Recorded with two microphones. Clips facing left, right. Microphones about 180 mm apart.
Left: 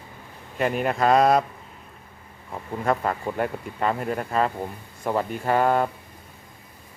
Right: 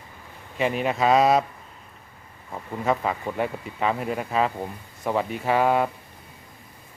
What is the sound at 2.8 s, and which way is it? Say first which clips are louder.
A man's voice: even; centre (ahead or behind).